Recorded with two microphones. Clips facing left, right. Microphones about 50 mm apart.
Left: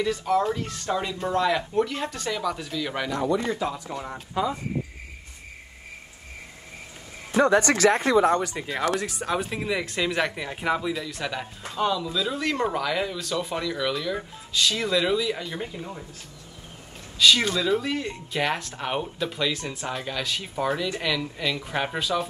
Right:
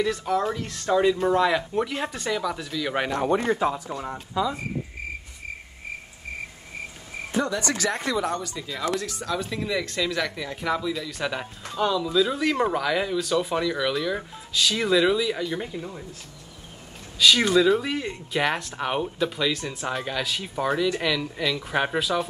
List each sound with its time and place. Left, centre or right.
0.0 s speech: centre
3.0 s speech: right
7.3 s speech: left
9.2 s speech: left
10.9 s speech: centre
17.5 s speech: centre